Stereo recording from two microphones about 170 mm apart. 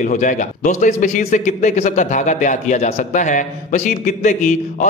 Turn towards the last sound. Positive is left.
turn(degrees=45)  # may be behind; listen again after turning